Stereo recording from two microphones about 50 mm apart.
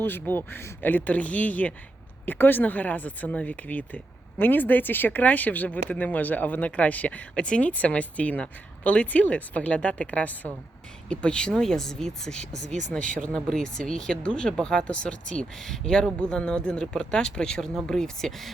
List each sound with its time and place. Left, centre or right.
0.0 s speech: left
11.1 s speech: centre
15.6 s speech: centre